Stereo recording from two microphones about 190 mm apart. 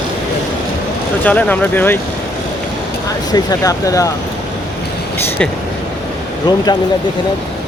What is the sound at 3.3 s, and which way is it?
Speech, 20° left (ahead or behind).